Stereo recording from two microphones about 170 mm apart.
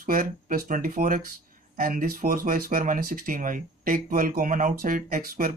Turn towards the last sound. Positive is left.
turn(degrees=-55)  # may be behind; listen again after turning